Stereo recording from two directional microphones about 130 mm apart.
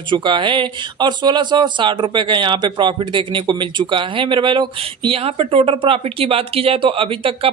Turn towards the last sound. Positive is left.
turn(degrees=-45)  # may be behind; listen again after turning